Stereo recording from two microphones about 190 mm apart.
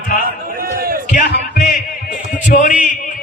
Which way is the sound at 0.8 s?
50° right (ahead or behind).